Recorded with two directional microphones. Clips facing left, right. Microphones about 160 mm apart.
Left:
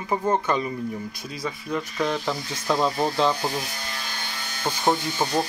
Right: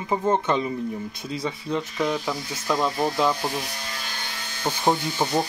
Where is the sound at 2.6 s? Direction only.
Centre (ahead or behind).